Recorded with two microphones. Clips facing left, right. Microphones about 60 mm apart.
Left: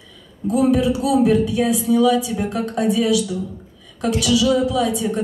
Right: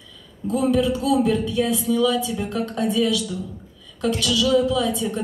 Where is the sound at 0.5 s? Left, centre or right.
Left.